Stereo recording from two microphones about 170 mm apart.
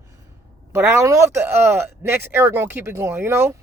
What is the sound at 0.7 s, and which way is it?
Speech, 15° right (ahead or behind).